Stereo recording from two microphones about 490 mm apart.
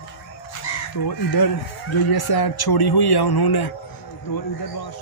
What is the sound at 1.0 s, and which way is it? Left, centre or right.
A man's voice, left.